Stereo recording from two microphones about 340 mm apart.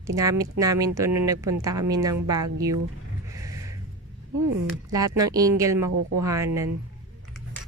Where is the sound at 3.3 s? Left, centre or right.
Centre.